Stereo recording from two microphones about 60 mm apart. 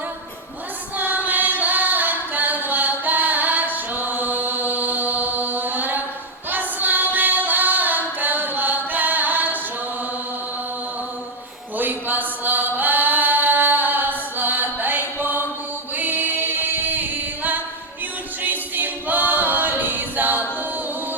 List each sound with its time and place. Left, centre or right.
0.9 s chant: right
6.5 s music: right
11.8 s chant: right
16.0 s singing: right
18.4 s a capella: right